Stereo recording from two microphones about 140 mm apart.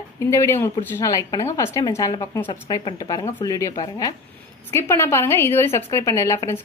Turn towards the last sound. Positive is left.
turn(degrees=20)  # may be behind; listen again after turning